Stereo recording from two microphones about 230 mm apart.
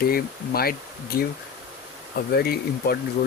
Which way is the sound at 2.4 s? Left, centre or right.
Left.